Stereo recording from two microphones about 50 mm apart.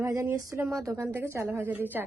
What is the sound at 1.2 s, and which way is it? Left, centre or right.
Speech, right.